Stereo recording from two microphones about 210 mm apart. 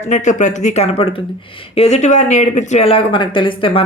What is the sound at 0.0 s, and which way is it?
Speech, 35° left (ahead or behind).